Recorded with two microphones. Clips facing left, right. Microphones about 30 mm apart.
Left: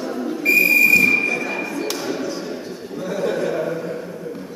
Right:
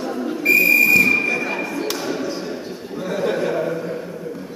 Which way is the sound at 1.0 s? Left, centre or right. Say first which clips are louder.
Even; centre.